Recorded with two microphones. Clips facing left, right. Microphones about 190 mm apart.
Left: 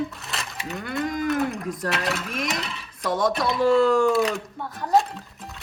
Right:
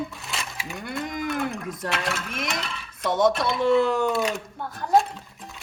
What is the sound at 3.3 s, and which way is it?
Speech, centre (ahead or behind).